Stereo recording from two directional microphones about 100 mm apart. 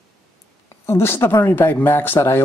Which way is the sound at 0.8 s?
25° left (ahead or behind).